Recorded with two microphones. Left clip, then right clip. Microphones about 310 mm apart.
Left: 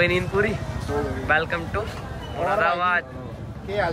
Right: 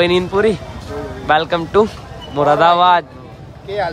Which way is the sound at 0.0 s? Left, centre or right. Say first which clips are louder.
Right 7 dB; centre.